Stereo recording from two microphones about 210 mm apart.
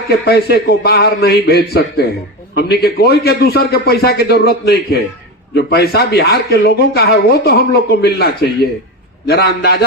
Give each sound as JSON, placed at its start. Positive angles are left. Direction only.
{"t": 0.3, "sound": "speech", "side_deg": 50}